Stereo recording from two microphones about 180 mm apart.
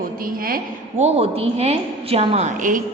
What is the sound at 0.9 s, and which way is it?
A woman's voice, 35° right (ahead or behind).